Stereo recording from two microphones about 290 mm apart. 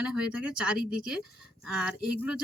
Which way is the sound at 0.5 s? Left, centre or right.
Centre.